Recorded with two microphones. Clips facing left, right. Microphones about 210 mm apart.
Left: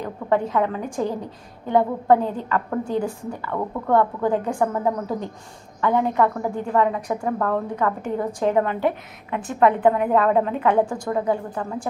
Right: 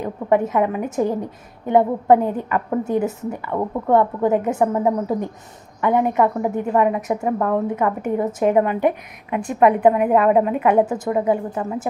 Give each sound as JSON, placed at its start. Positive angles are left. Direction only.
{"t": 0.0, "sound": "a woman's voice", "side_deg": -20}